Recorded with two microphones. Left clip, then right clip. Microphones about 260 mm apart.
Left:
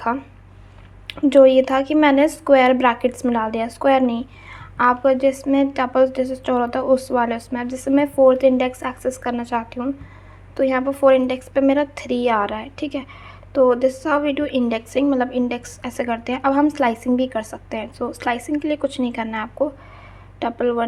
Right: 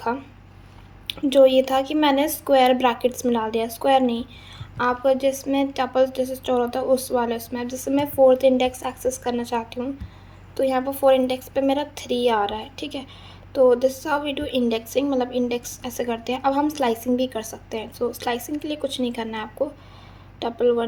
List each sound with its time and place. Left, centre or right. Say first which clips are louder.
1.0 s a woman's voice: left 4 dB; centre